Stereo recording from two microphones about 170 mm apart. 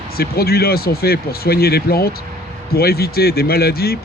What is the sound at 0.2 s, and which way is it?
Speech, 65° left (ahead or behind).